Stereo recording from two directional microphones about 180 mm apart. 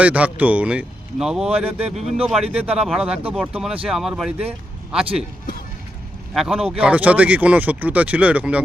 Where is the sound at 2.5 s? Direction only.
5° right (ahead or behind).